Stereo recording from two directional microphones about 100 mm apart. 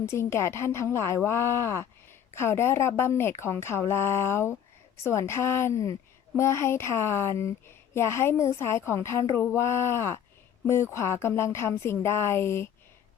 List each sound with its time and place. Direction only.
0.0 s a woman's voice: 25° left (ahead or behind)